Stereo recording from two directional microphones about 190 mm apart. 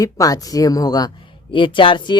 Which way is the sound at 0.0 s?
20° left (ahead or behind).